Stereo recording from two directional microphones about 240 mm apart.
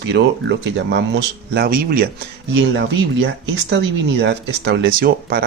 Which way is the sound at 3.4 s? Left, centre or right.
Right.